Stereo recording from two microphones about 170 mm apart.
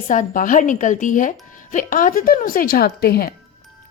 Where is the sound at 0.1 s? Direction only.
50° left (ahead or behind).